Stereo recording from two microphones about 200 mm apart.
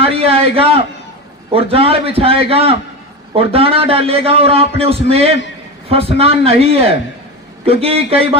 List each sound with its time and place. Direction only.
0.0 s a man's voice: 30° right (ahead or behind)